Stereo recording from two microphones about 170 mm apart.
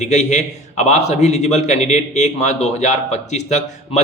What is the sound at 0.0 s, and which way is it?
A man's voice, 45° left (ahead or behind).